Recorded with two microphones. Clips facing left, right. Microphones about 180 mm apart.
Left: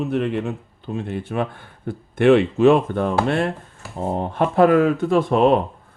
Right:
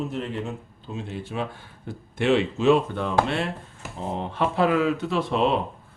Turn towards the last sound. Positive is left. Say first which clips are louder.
# left 7 dB
turn(degrees=50)  # may be behind; listen again after turning